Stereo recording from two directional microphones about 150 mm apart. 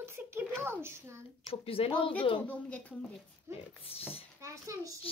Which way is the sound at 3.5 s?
40° left (ahead or behind).